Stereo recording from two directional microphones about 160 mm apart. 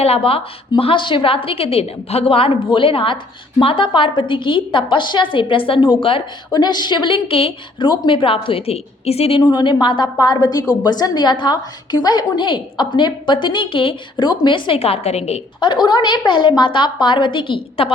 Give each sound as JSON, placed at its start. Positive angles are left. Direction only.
{"t": 0.0, "sound": "a woman's voice", "side_deg": 35}
{"t": 15.7, "sound": "a woman's voice", "side_deg": 30}